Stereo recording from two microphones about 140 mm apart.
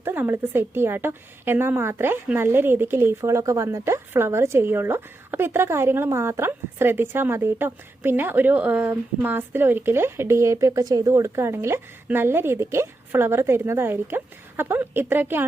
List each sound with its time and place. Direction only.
0.0 s speech: 15° right (ahead or behind)